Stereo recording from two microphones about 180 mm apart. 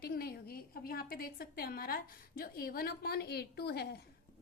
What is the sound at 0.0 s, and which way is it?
A woman's voice, 60° left (ahead or behind).